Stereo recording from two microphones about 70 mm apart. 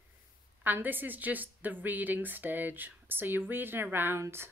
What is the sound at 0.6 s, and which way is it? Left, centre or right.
Speech, right.